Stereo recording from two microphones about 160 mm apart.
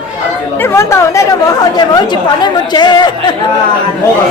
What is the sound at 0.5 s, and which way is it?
Speech, 15° left (ahead or behind).